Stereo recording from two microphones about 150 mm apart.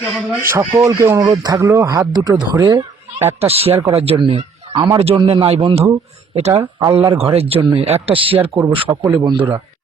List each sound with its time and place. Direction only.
0.3 s a man's voice: 15° right (ahead or behind)
3.4 s a man's voice: 40° right (ahead or behind)
6.5 s a man's voice: 25° right (ahead or behind)
8.4 s a man's voice: 15° right (ahead or behind)
8.7 s a man's voice: 35° right (ahead or behind)